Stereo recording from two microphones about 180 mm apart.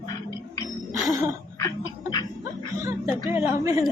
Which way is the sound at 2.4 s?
15° right (ahead or behind).